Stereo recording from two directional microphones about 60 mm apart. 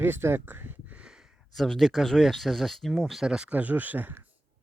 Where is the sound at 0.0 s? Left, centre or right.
Right.